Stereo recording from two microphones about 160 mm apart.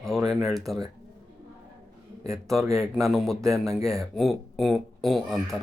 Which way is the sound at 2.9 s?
Centre (ahead or behind).